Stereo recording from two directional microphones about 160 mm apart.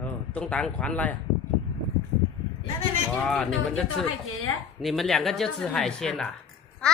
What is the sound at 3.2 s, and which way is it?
A child's voice, 5° left (ahead or behind).